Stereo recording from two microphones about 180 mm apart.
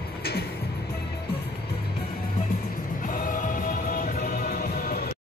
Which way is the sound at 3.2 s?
45° left (ahead or behind).